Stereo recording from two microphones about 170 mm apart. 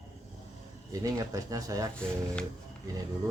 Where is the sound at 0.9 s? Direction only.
20° right (ahead or behind).